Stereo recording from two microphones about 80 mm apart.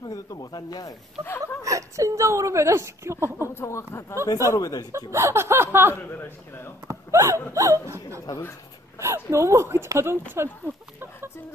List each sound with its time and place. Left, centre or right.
0.0 s snake: left
1.2 s speech: left
1.6 s a woman's voice: right
3.4 s speech: left
4.5 s speech: left
4.9 s a woman's voice: right
6.0 s a man's voice: left
6.9 s a sound: right
7.5 s speech: right
8.3 s speech: left
9.0 s a woman's voice: right